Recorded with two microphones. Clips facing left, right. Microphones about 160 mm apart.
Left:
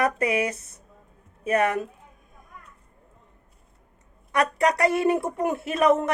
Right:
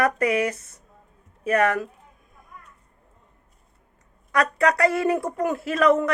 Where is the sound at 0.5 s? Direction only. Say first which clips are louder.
Left 1 dB; 60° right (ahead or behind).